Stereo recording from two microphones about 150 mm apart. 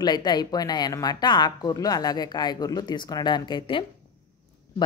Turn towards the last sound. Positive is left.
turn(degrees=30)  # may be behind; listen again after turning